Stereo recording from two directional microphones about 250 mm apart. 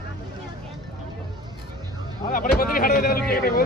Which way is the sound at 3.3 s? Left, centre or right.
Left.